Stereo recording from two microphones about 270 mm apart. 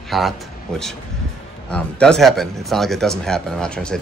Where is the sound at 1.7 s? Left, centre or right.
Centre.